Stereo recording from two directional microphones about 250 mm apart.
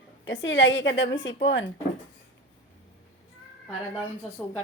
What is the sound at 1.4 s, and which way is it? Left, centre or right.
Speech, left.